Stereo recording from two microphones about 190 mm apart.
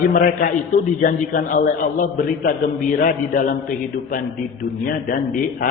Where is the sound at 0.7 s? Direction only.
45° left (ahead or behind).